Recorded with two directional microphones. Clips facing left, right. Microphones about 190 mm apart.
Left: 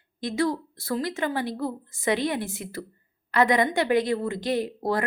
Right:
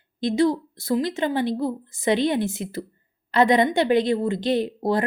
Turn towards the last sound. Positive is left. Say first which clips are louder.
# right 4 dB
turn(degrees=-25)  # may be behind; listen again after turning